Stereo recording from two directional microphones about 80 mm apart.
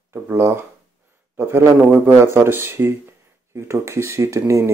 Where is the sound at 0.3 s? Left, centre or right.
Right.